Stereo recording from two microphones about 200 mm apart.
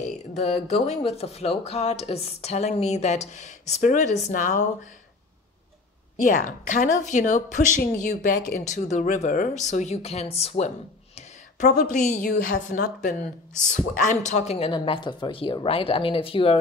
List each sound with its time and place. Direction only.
0.3 s speech: 30° left (ahead or behind)
6.1 s speech: 40° left (ahead or behind)